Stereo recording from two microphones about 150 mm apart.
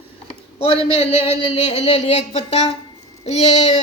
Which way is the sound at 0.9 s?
45° left (ahead or behind).